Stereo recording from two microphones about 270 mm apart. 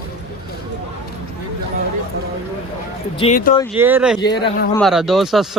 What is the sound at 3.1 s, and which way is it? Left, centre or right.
Speech, left.